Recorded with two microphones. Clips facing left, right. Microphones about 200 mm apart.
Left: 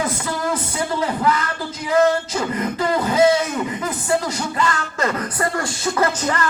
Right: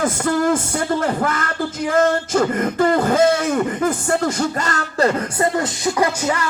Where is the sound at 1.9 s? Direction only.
50° right (ahead or behind).